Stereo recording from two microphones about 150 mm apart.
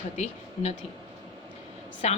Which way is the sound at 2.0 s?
45° left (ahead or behind).